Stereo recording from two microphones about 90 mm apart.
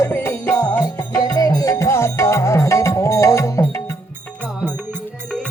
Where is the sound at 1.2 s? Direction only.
45° left (ahead or behind).